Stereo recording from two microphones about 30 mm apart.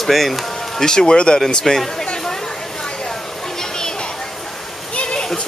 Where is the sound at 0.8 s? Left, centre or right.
Left.